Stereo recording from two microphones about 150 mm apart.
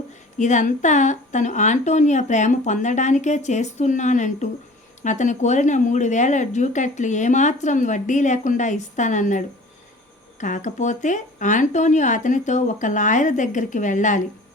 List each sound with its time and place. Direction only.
0.3 s a woman's voice: 55° left (ahead or behind)
10.4 s a woman's voice: 55° left (ahead or behind)